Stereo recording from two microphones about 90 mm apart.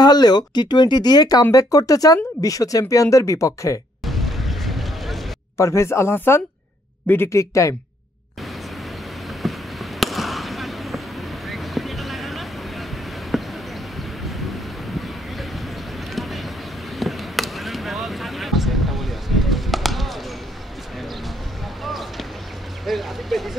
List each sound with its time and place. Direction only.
0.0 s speech: 50° left (ahead or behind)
4.0 s vehicle: centre (ahead or behind)
5.6 s speech: 30° left (ahead or behind)
9.4 s fireworks: centre (ahead or behind)
11.4 s vehicle: centre (ahead or behind)
13.3 s basketball bounce: centre (ahead or behind)
16.1 s vehicle: centre (ahead or behind)
17.0 s a sound: centre (ahead or behind)
21.8 s a sound: centre (ahead or behind)